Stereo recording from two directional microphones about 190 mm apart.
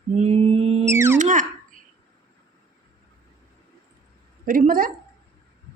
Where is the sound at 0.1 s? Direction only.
35° right (ahead or behind).